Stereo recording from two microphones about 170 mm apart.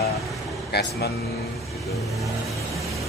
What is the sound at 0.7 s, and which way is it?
Speech, 75° left (ahead or behind).